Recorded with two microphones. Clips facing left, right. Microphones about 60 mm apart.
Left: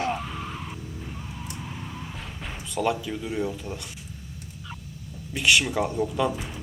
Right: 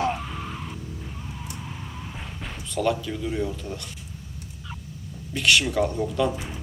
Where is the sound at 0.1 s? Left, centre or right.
Centre.